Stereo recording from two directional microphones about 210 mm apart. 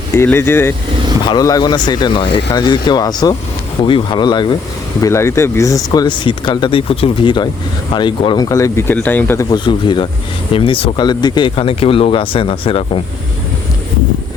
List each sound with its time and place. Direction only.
0.1 s speech: 10° left (ahead or behind)